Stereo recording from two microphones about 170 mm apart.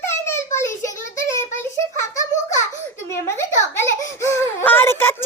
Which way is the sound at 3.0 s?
15° left (ahead or behind).